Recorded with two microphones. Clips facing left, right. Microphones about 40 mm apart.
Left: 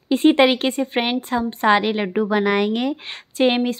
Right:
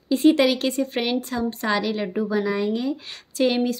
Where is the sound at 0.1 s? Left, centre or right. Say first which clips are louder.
Left 3 dB; left.